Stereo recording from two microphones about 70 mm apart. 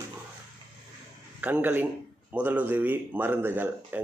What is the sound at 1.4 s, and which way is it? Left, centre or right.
Speech, right.